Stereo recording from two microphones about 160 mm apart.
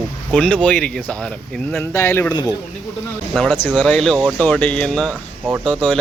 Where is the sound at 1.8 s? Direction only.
15° left (ahead or behind).